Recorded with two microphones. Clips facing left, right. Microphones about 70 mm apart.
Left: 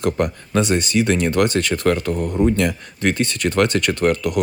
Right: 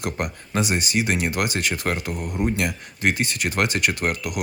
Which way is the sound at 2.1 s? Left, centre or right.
Left.